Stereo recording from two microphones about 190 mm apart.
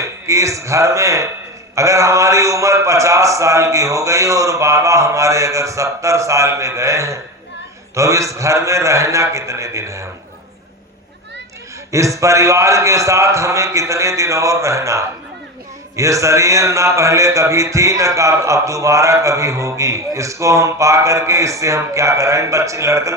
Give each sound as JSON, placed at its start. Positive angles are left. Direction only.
{"t": 0.0, "sound": "speech", "side_deg": -15}
{"t": 11.9, "sound": "speech", "side_deg": -15}